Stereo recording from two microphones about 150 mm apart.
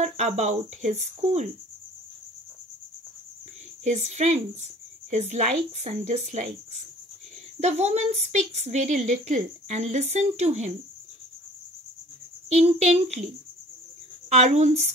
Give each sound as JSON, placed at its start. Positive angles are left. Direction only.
{"t": 0.0, "sound": "a woman's voice", "side_deg": -50}
{"t": 3.8, "sound": "a woman's voice", "side_deg": -50}
{"t": 12.4, "sound": "a woman's voice", "side_deg": -50}
{"t": 14.3, "sound": "a woman's voice", "side_deg": -50}